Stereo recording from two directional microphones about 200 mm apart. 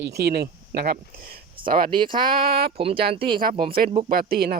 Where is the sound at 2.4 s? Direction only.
50° right (ahead or behind).